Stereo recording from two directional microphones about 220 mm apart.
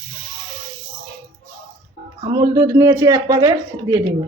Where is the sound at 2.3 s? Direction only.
15° right (ahead or behind).